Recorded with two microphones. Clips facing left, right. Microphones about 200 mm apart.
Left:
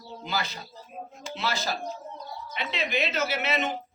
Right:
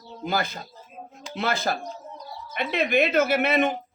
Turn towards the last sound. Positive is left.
turn(degrees=-55)  # may be behind; listen again after turning